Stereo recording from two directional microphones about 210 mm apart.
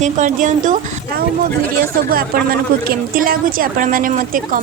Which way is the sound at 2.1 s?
45° right (ahead or behind).